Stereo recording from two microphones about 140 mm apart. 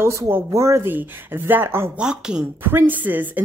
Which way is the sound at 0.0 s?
20° right (ahead or behind).